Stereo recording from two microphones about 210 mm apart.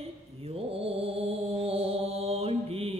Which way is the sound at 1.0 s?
30° right (ahead or behind).